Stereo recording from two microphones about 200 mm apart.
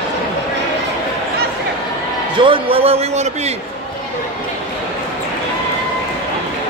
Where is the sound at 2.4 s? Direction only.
25° right (ahead or behind).